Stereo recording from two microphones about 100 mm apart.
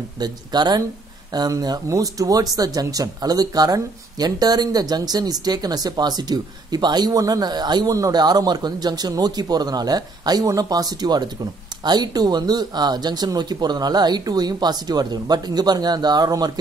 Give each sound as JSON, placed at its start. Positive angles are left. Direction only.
{"t": 0.2, "sound": "speech", "side_deg": -45}